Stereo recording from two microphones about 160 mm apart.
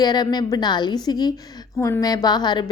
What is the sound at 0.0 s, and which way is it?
Speech, 25° left (ahead or behind).